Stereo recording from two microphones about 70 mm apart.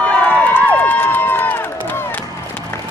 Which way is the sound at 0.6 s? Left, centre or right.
Left.